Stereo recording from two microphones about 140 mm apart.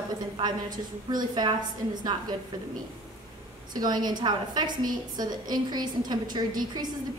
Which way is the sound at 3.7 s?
30° right (ahead or behind).